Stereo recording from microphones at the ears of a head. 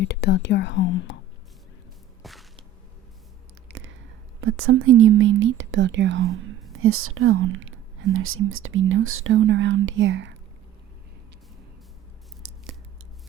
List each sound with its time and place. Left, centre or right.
0.0 s speech: left
4.4 s speech: right